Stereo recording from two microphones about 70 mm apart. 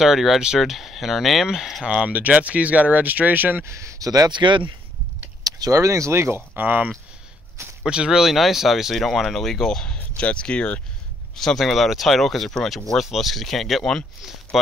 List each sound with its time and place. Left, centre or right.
0.0 s speech: centre
2.0 s speech: centre
3.6 s speech: right
4.1 s speech: right
5.4 s speech: right
6.6 s speech: right
7.8 s speech: centre
11.3 s speech: centre